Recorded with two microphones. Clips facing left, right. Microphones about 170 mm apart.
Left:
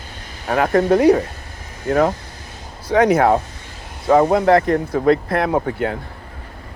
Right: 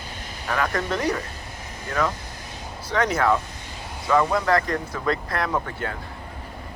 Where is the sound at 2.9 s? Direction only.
60° left (ahead or behind).